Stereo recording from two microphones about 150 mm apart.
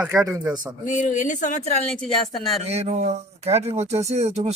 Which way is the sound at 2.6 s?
45° right (ahead or behind).